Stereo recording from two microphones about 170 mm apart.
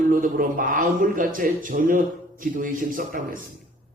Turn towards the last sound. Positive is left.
turn(degrees=-55)  # may be behind; listen again after turning